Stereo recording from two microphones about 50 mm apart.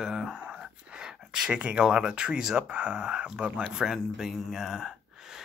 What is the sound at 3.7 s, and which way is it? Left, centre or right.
Speech, centre.